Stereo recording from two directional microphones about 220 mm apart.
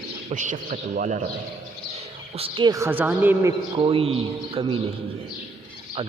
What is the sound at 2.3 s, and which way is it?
A woman's voice, 25° right (ahead or behind).